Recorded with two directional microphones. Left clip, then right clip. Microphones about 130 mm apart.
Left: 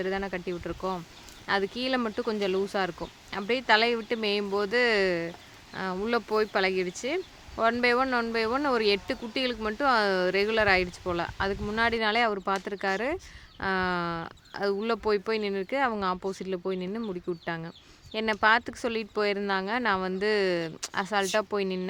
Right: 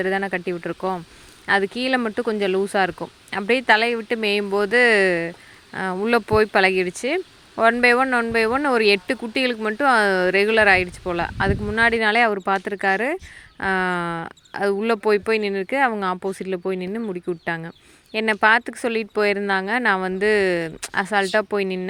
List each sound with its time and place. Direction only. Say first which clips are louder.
0.0 s speech: right 8 dB; 40° right (ahead or behind)